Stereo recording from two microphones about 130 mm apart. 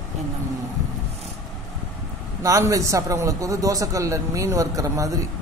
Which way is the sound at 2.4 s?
25° right (ahead or behind).